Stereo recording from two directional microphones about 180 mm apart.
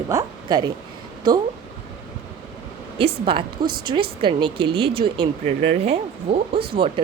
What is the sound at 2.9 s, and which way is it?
Speech, 30° right (ahead or behind).